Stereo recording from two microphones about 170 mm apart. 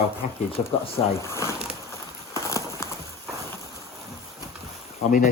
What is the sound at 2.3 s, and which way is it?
Horse, 15° left (ahead or behind).